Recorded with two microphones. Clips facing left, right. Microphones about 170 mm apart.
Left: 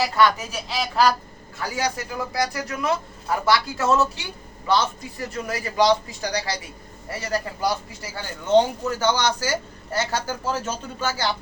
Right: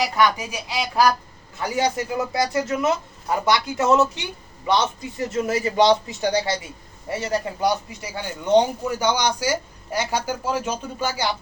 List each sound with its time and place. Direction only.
0.0 s a man's voice: 15° right (ahead or behind)